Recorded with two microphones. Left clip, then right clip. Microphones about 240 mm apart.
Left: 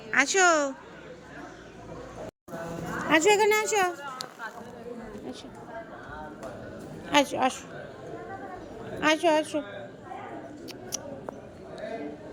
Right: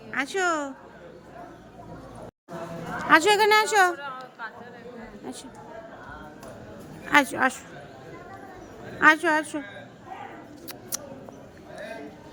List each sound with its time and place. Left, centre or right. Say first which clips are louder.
0.1 s a woman's voice: left 4 dB; centre
3.2 s a woman's voice: right 2 dB; centre
7.0 s a woman's voice: right 3 dB; centre
9.0 s a woman's voice: right 4 dB; centre
10.9 s a sound: right 1 dB; centre